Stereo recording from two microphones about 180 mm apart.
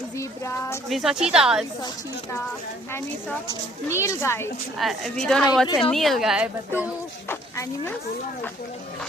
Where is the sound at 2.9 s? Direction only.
15° left (ahead or behind).